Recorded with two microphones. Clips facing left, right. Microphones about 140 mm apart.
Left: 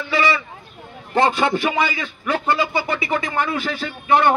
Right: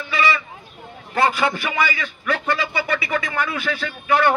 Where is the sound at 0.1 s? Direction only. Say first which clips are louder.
Left 1 dB; 25° left (ahead or behind).